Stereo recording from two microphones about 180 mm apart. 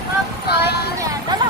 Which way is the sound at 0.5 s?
65° left (ahead or behind).